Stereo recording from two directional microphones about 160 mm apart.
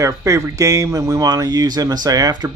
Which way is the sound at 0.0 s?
20° right (ahead or behind).